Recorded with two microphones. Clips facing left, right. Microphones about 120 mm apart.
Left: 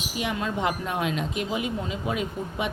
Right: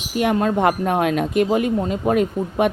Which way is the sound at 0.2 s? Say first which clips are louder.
Right 10 dB; 50° right (ahead or behind).